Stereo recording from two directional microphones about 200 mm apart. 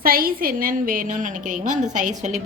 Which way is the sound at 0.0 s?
45° right (ahead or behind).